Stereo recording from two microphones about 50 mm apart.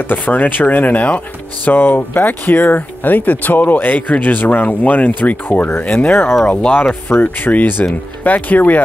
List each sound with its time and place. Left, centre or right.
0.1 s speech: left
7.1 s speech: left